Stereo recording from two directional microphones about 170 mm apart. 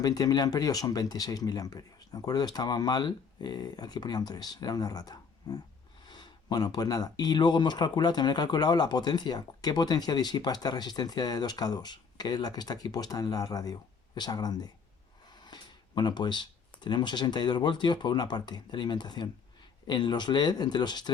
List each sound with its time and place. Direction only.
0.0 s speech: 20° left (ahead or behind)